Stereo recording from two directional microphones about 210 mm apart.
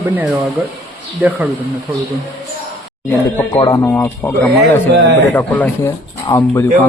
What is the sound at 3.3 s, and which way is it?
Speech, 20° left (ahead or behind).